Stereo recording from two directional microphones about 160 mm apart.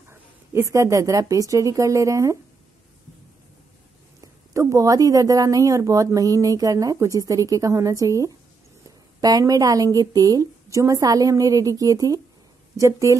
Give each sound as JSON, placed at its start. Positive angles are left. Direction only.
{"t": 0.1, "sound": "speech", "side_deg": -15}
{"t": 4.2, "sound": "speech", "side_deg": -20}